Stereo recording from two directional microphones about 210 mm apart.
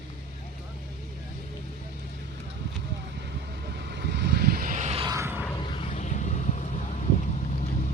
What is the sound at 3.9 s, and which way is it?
Vehicle, 55° right (ahead or behind).